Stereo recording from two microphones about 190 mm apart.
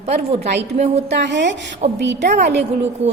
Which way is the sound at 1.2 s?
70° right (ahead or behind).